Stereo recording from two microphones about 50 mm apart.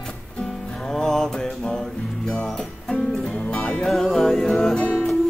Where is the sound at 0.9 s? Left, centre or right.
Centre.